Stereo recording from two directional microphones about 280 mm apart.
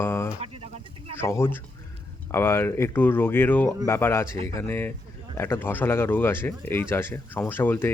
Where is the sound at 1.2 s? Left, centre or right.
Centre.